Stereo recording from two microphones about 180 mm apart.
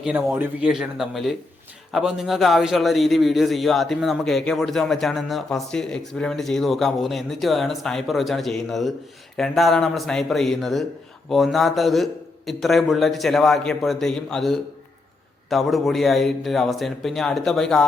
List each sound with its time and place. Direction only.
0.0 s a man's voice: 5° right (ahead or behind)